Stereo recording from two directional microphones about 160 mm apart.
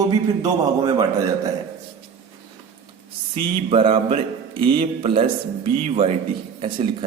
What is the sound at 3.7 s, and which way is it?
A man's voice, 35° right (ahead or behind).